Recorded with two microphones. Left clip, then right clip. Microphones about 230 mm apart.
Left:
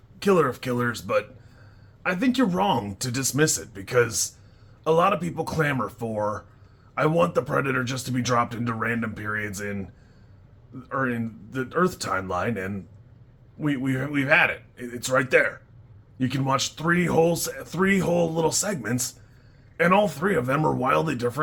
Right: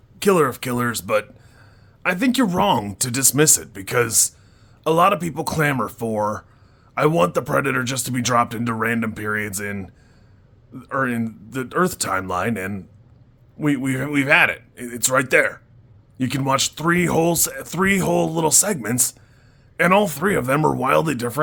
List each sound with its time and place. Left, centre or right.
0.2 s speech: right